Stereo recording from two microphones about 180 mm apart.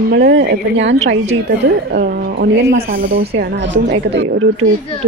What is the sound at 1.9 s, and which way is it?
Speech, 60° right (ahead or behind).